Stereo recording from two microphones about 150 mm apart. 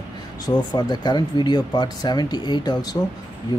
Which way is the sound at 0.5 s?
25° left (ahead or behind).